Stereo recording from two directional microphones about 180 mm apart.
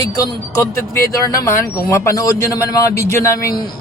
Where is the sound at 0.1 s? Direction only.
20° left (ahead or behind).